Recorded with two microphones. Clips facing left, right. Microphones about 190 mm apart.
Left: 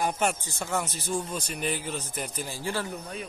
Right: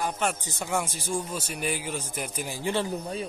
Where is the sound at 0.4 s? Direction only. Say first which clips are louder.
Right 1 dB; 15° right (ahead or behind); by 3.3 s 30° right (ahead or behind).